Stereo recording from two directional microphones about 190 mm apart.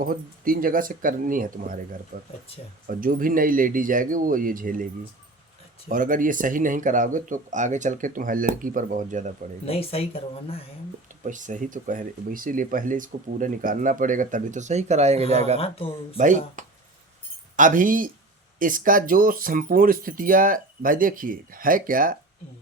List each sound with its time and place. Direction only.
0.0 s speech: 50° right (ahead or behind)
5.9 s speech: 45° right (ahead or behind)
9.6 s speech: 30° left (ahead or behind)
11.2 s speech: 40° right (ahead or behind)
15.5 s speech: 30° left (ahead or behind)
16.1 s speech: 40° right (ahead or behind)